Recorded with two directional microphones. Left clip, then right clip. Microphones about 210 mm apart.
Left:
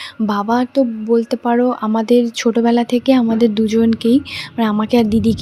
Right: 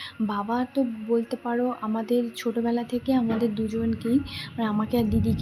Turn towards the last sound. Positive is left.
turn(degrees=35)  # may be behind; listen again after turning